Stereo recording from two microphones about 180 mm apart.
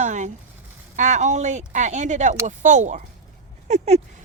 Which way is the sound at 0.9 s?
40° right (ahead or behind).